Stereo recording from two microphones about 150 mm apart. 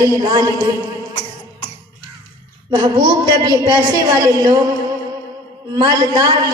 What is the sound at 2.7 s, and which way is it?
A woman's voice, 25° right (ahead or behind).